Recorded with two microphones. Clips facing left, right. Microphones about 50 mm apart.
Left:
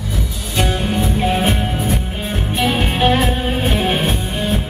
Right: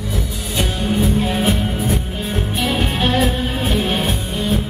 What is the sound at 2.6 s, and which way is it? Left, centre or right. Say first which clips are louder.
Music: left 4 dB; centre.